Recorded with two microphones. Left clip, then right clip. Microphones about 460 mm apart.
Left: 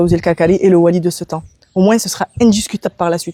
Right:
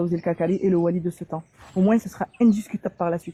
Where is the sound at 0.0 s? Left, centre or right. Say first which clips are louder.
Left 11 dB; left.